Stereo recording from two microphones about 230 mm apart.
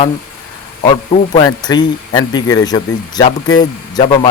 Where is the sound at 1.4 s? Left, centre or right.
Centre.